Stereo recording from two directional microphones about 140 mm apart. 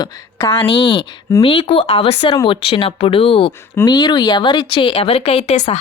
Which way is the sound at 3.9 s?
30° left (ahead or behind).